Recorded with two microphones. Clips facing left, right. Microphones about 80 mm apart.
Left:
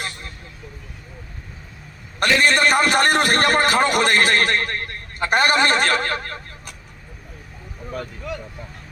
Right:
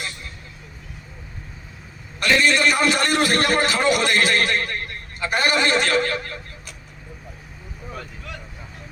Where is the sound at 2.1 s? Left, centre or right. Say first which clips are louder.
Left 1 dB; left.